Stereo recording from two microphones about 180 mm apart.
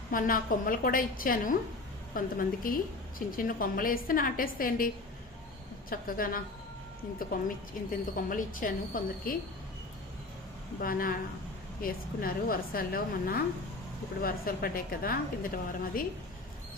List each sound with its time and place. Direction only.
0.1 s a woman's voice: 50° left (ahead or behind)
2.6 s a woman's voice: 50° left (ahead or behind)
5.9 s a woman's voice: 50° left (ahead or behind)
10.8 s a woman's voice: 55° left (ahead or behind)